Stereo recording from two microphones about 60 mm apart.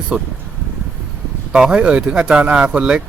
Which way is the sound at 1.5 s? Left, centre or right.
Centre.